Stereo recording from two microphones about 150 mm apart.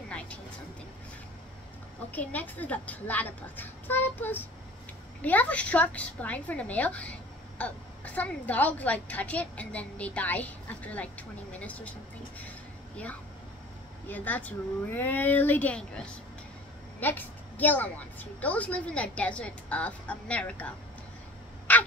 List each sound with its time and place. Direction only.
2.0 s a woman's voice: 10° left (ahead or behind)
12.4 s a sound: 10° left (ahead or behind)
14.0 s a woman's voice: 10° left (ahead or behind)
21.7 s crow: 10° left (ahead or behind)